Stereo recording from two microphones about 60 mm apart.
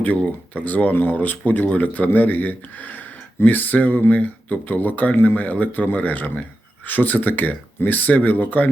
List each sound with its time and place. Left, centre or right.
0.0 s speech: left